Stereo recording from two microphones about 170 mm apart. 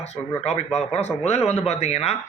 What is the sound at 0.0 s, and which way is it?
Speech, 40° left (ahead or behind).